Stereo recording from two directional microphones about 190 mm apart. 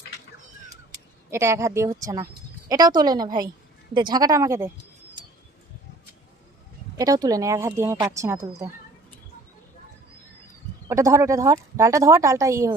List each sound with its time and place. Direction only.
0.9 s a woman's voice: 15° right (ahead or behind)
6.9 s speech: 20° right (ahead or behind)
10.8 s speech: 15° right (ahead or behind)